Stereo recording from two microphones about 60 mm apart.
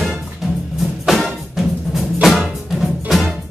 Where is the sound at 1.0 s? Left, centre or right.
Centre.